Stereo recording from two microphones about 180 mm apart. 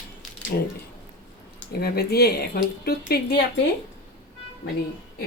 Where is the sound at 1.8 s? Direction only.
60° left (ahead or behind).